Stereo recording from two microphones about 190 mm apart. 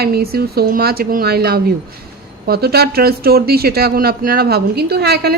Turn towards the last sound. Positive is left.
turn(degrees=-60)  # may be behind; listen again after turning